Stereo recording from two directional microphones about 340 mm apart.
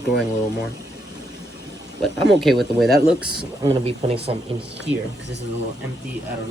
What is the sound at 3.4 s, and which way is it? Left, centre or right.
Speech, centre.